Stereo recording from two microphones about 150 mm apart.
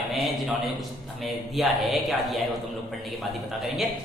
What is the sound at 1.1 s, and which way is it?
A woman's voice, centre (ahead or behind).